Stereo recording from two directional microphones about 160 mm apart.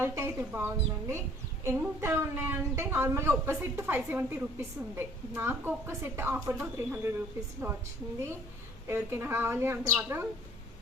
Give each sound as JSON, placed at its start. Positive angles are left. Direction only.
{"t": 0.0, "sound": "a woman's voice", "side_deg": -15}
{"t": 8.9, "sound": "a woman's voice", "side_deg": -15}